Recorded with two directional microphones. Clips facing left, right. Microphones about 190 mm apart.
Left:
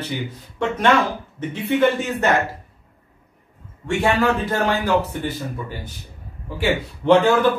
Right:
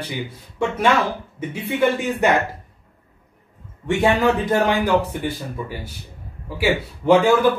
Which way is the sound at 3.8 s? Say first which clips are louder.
Right 1 dB; 15° right (ahead or behind).